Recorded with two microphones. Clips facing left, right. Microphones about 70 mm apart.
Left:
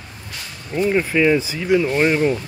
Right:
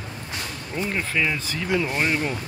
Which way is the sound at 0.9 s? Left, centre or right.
Centre.